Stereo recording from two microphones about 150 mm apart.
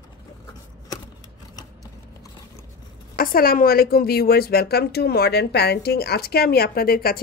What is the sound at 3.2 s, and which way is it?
A woman's voice, 75° left (ahead or behind).